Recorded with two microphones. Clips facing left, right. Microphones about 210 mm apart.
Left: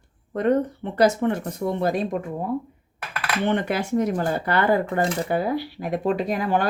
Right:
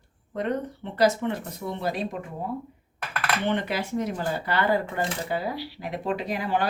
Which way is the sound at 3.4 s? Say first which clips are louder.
Left 6 dB; 50° left (ahead or behind).